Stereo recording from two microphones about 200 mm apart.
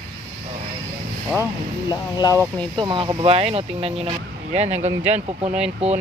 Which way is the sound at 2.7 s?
25° right (ahead or behind).